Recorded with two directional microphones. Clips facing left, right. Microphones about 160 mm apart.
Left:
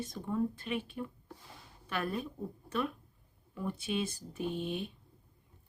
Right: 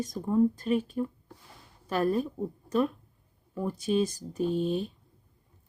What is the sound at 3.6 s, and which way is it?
Speech, 40° right (ahead or behind).